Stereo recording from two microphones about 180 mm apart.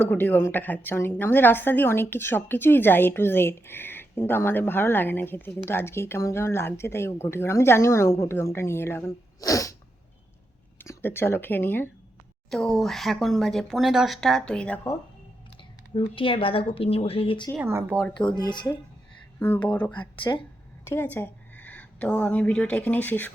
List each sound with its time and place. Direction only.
0.0 s a woman's voice: 10° left (ahead or behind)
10.8 s speech: 10° left (ahead or behind)
16.0 s speech: 30° left (ahead or behind)
17.5 s speech: 10° right (ahead or behind)
18.2 s speech: 25° left (ahead or behind)
19.6 s a woman's voice: 10° left (ahead or behind)
20.3 s speech: 20° left (ahead or behind)